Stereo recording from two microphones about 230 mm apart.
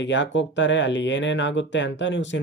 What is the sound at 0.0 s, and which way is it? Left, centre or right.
Speech, left.